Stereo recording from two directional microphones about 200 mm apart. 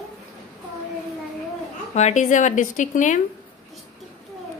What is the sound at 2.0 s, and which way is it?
A woman's voice, 35° left (ahead or behind).